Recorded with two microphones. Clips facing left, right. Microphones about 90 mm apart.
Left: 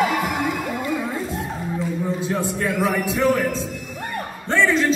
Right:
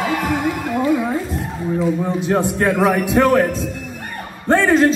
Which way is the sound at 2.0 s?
65° right (ahead or behind).